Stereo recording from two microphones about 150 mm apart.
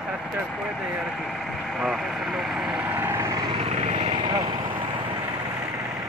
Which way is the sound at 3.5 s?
45° right (ahead or behind).